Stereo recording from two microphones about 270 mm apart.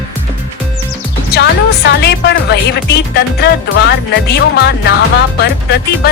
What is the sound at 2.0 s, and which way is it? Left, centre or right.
Music, left.